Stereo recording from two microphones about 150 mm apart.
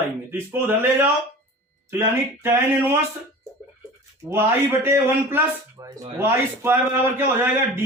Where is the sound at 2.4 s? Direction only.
15° right (ahead or behind).